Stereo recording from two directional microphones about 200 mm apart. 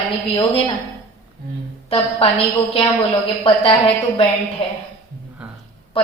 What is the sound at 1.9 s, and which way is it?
Speech, 25° left (ahead or behind).